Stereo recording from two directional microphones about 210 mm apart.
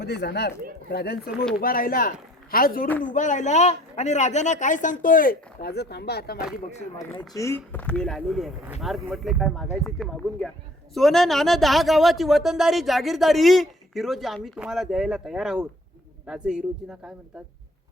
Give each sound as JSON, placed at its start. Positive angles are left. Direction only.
{"t": 0.0, "sound": "speech", "side_deg": 55}
{"t": 7.2, "sound": "speech", "side_deg": 15}